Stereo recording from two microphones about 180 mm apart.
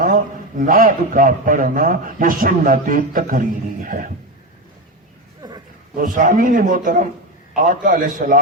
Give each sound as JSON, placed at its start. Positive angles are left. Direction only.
{"t": 0.6, "sound": "a man's voice", "side_deg": -50}
{"t": 6.0, "sound": "a man's voice", "side_deg": -50}